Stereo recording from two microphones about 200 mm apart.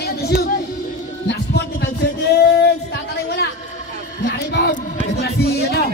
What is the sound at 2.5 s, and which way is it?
Speech, 50° left (ahead or behind).